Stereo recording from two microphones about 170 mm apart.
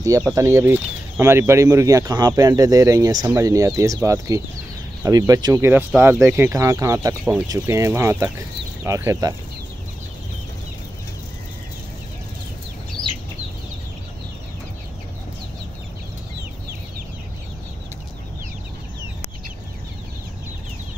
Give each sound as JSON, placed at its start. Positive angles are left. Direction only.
{"t": 0.0, "sound": "speech", "side_deg": -20}